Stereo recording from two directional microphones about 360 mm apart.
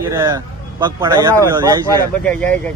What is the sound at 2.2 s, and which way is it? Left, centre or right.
Speech, centre.